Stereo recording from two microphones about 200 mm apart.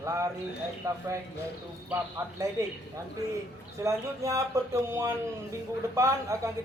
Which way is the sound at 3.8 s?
15° right (ahead or behind).